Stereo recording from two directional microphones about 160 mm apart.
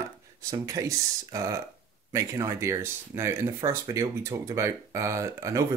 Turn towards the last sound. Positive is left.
turn(degrees=-20)  # may be behind; listen again after turning